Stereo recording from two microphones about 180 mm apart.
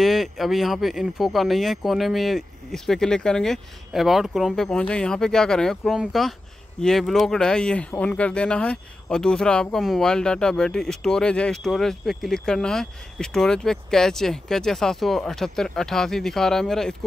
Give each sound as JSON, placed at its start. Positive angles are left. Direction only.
{"t": 0.0, "sound": "speech", "side_deg": 0}